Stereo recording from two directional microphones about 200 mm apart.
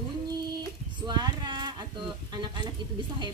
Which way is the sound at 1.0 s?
20° right (ahead or behind).